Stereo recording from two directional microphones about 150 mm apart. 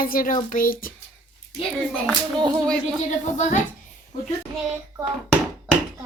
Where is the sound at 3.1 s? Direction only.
55° left (ahead or behind).